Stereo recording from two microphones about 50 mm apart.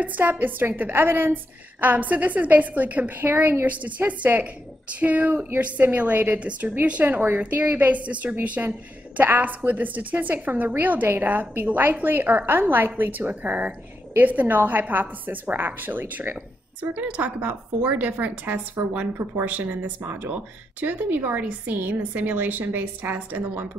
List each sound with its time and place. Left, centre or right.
0.2 s a woman's voice: right